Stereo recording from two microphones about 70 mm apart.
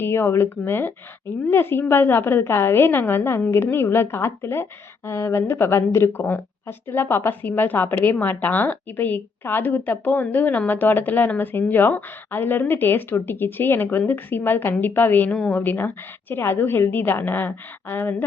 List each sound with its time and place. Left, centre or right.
0.0 s a woman's voice: left